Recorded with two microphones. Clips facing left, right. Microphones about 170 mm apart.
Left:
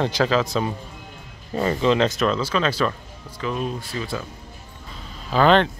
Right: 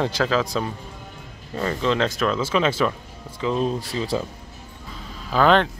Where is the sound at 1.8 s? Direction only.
5° left (ahead or behind).